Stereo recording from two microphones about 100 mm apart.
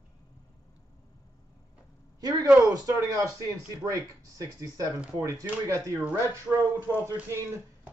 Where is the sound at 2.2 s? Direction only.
40° right (ahead or behind).